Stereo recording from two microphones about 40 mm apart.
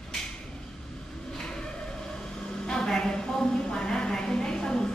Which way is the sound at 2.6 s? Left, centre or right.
Centre.